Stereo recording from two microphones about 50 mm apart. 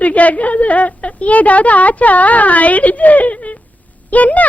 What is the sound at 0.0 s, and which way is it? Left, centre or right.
A woman's voice, left.